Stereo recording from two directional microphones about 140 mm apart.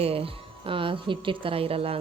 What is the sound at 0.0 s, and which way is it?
A woman's voice, 45° right (ahead or behind).